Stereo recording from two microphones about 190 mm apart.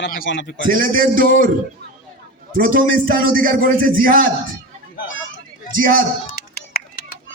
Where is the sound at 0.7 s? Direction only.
50° right (ahead or behind).